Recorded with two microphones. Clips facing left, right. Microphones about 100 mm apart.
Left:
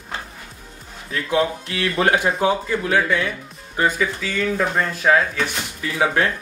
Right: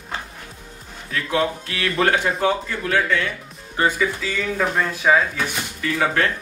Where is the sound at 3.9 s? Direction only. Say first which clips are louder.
Even; centre (ahead or behind).